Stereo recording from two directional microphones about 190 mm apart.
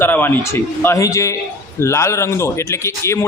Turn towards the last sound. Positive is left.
turn(degrees=15)  # may be behind; listen again after turning